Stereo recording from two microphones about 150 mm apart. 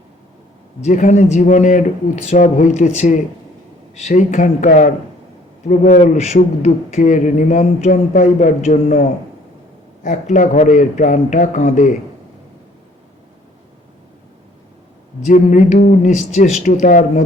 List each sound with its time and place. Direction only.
0.9 s a man's voice: 55° left (ahead or behind)
10.0 s speech: 55° left (ahead or behind)
15.3 s speech: 55° left (ahead or behind)